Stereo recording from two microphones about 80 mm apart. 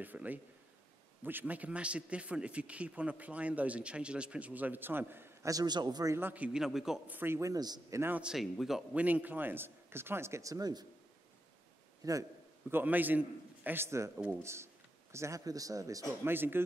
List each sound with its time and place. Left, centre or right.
0.0 s a man's voice: right
5.4 s a man's voice: right
6.1 s a man's voice: right
6.6 s a man's voice: centre
7.1 s a man's voice: right
7.3 s speech: right
8.1 s a man's voice: centre
8.9 s a man's voice: right
12.0 s a man's voice: right
12.7 s a man's voice: right
16.3 s a man's voice: right